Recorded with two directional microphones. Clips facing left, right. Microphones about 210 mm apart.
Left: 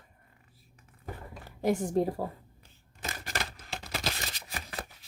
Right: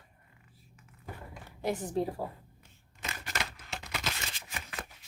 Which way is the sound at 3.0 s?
35° left (ahead or behind).